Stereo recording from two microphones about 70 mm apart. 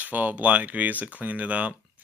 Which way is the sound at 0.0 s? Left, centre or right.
Right.